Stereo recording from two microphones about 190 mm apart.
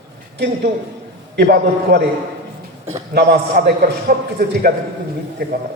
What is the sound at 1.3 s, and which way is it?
Speech, 60° right (ahead or behind).